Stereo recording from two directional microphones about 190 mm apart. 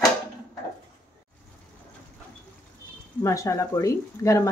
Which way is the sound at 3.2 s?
15° left (ahead or behind).